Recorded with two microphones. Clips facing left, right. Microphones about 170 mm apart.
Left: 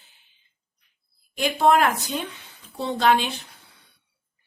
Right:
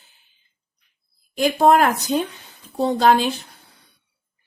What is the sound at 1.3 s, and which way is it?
Speech, 40° right (ahead or behind).